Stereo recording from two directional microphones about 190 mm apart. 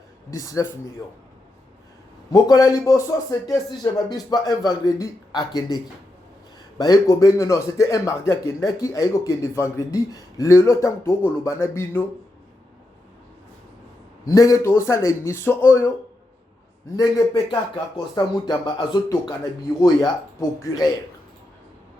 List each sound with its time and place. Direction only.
0.3 s a man's voice: 15° left (ahead or behind)
2.3 s a man's voice: 20° left (ahead or behind)
14.3 s a man's voice: 15° left (ahead or behind)
17.0 s speech: 20° left (ahead or behind)